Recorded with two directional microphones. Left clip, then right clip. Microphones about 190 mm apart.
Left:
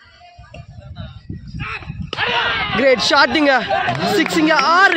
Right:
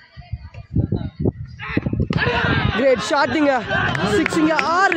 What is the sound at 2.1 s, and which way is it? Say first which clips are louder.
Speech: left 2 dB; 55° right (ahead or behind).